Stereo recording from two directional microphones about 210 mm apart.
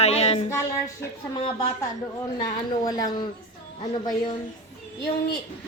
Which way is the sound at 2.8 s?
20° left (ahead or behind).